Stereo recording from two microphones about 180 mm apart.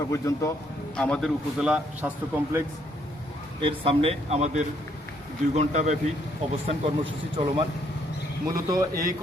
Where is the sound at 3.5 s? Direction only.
30° right (ahead or behind).